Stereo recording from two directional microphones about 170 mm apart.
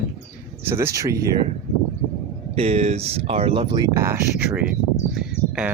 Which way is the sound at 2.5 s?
35° right (ahead or behind).